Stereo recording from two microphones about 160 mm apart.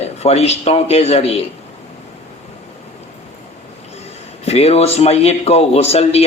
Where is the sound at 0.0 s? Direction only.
40° left (ahead or behind).